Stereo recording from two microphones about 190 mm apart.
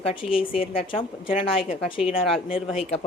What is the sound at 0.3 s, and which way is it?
Speech, 30° left (ahead or behind).